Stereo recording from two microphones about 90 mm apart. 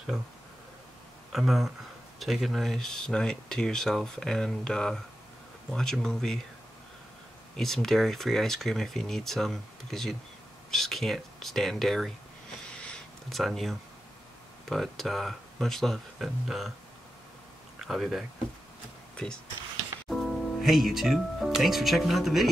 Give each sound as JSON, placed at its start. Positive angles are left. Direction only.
{"t": 1.3, "sound": "speech", "side_deg": 0}
{"t": 7.5, "sound": "speech", "side_deg": 5}
{"t": 12.6, "sound": "a sound", "side_deg": 10}
{"t": 13.4, "sound": "speech", "side_deg": 0}
{"t": 17.7, "sound": "speech", "side_deg": -5}
{"t": 19.1, "sound": "speech", "side_deg": 10}